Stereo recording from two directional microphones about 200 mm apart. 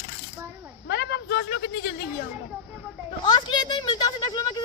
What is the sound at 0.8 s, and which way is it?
Speech, 60° left (ahead or behind).